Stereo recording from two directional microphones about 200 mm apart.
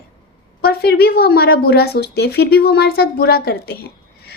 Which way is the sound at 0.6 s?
50° left (ahead or behind).